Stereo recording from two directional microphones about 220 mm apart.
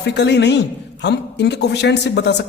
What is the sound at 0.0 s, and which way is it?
A man's voice, 50° left (ahead or behind).